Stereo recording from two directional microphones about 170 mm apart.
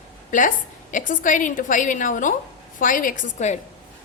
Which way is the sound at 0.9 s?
50° left (ahead or behind).